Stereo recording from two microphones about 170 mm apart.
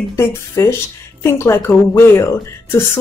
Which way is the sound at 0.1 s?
15° left (ahead or behind).